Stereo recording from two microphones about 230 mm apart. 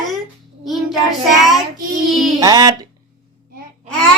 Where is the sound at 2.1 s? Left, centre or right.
Centre.